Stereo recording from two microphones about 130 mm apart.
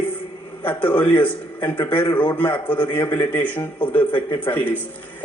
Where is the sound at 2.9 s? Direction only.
15° left (ahead or behind).